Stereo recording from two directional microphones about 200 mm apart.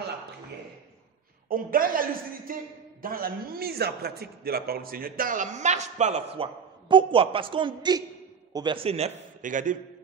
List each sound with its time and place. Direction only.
1.5 s a man's voice: 45° right (ahead or behind)